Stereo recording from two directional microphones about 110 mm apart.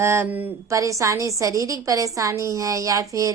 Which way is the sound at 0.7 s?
30° right (ahead or behind).